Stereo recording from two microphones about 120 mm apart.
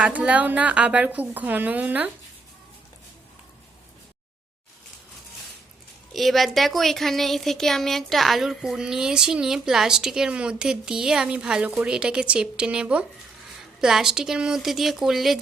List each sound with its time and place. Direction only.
0.0 s a woman's voice: 10° right (ahead or behind)
6.1 s a woman's voice: centre (ahead or behind)